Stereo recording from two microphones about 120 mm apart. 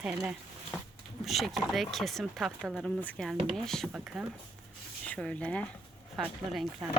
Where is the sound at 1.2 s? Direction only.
Centre (ahead or behind).